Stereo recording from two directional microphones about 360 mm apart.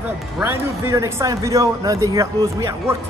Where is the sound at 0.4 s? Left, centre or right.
Centre.